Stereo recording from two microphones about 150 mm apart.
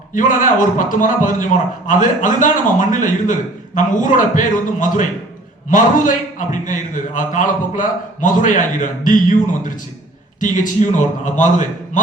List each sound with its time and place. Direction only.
0.1 s a man's voice: 60° left (ahead or behind)